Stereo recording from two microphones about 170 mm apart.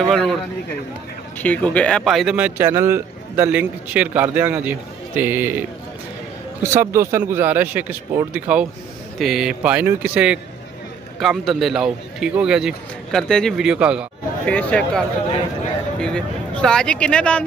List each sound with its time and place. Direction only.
0.1 s a man's voice: centre (ahead or behind)
1.4 s a man's voice: 10° left (ahead or behind); by 5.7 s 10° right (ahead or behind)
6.7 s a man's voice: 15° right (ahead or behind)
14.4 s a man's voice: 10° left (ahead or behind)